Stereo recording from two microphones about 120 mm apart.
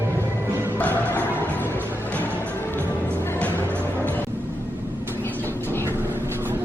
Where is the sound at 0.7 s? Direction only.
15° left (ahead or behind).